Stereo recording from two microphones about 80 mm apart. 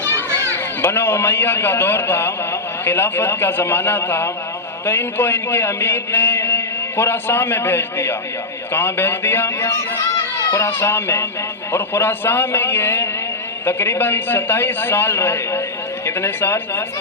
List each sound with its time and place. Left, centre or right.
0.1 s children playing: left
0.5 s a man's voice: left